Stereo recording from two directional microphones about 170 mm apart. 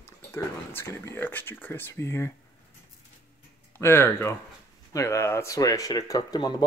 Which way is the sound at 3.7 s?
15° left (ahead or behind).